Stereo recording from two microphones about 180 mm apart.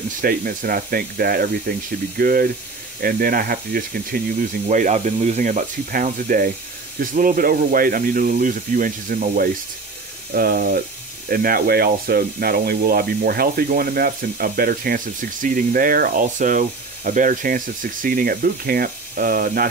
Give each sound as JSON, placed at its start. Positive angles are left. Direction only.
{"t": 0.2, "sound": "speech", "side_deg": -50}